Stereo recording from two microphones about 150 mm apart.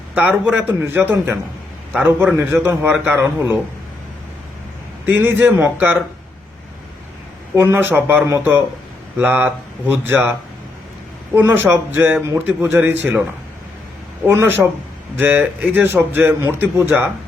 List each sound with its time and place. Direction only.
0.1 s a man's voice: 10° right (ahead or behind)
5.0 s a man's voice: 15° right (ahead or behind)
7.5 s a man's voice: 15° right (ahead or behind)
11.3 s a man's voice: 15° right (ahead or behind)
14.3 s a man's voice: 15° right (ahead or behind)